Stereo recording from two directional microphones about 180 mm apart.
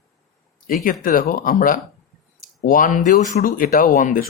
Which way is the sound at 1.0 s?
50° left (ahead or behind).